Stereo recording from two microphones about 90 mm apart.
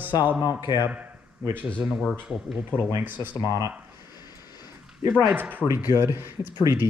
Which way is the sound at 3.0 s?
20° right (ahead or behind).